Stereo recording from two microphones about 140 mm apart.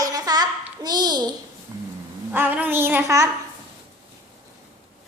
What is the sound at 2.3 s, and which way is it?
Speech, 15° right (ahead or behind).